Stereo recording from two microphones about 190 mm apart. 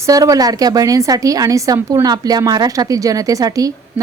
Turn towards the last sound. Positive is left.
turn(degrees=-20)  # may be behind; listen again after turning